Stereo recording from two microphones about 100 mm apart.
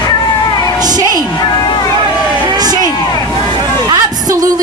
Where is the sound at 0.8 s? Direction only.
40° right (ahead or behind).